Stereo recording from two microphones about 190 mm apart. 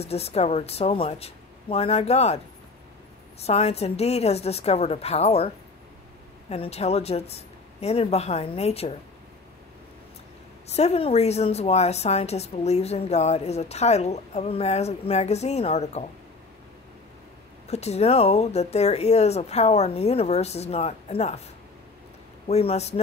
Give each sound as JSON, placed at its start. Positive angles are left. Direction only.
{"t": 0.0, "sound": "a woman's voice", "side_deg": 35}
{"t": 6.5, "sound": "a woman's voice", "side_deg": 30}
{"t": 10.7, "sound": "a woman's voice", "side_deg": 35}
{"t": 17.6, "sound": "a woman's voice", "side_deg": 35}
{"t": 22.5, "sound": "a woman's voice", "side_deg": 35}